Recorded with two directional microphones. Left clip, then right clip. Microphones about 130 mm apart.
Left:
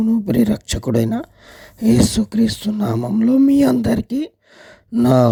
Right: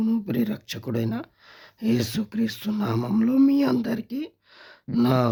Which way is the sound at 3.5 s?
55° left (ahead or behind).